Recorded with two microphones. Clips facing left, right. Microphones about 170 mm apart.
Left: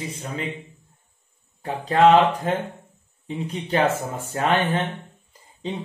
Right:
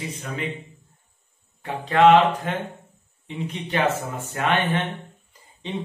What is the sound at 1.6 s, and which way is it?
Speech, 35° left (ahead or behind).